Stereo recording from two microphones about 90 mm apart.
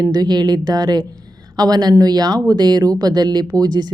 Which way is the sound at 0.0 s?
45° right (ahead or behind).